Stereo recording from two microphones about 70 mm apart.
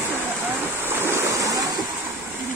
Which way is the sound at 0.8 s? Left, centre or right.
Right.